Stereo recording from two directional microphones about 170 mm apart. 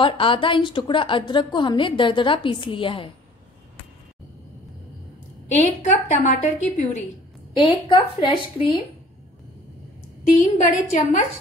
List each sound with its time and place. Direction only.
0.0 s a woman's voice: 30° left (ahead or behind)
5.6 s a woman's voice: 40° left (ahead or behind)
7.5 s a woman's voice: 30° left (ahead or behind)
10.4 s a woman's voice: 50° left (ahead or behind)